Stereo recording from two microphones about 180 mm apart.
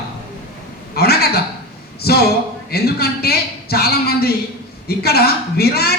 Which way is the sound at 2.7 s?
60° left (ahead or behind).